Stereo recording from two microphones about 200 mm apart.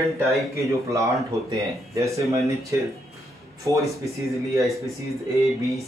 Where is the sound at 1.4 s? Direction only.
15° right (ahead or behind).